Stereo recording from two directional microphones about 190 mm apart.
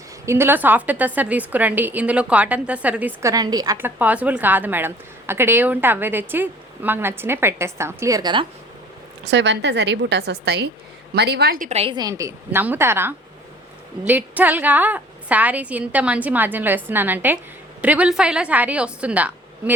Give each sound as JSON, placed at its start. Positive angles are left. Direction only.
{"t": 0.3, "sound": "a woman's voice", "side_deg": -10}
{"t": 9.2, "sound": "a woman's voice", "side_deg": -70}
{"t": 11.7, "sound": "a woman's voice", "side_deg": -30}